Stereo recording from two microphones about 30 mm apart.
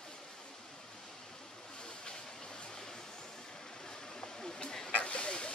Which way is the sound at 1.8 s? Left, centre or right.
Left.